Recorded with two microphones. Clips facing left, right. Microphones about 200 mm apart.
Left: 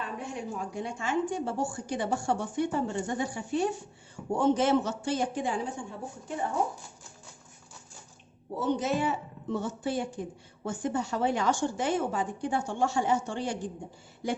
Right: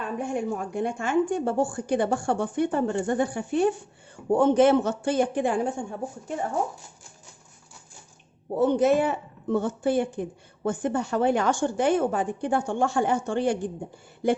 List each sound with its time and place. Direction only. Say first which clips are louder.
0.0 s a woman's voice: right 8 dB; 50° right (ahead or behind)
8.5 s a woman's voice: right 8 dB; 55° right (ahead or behind)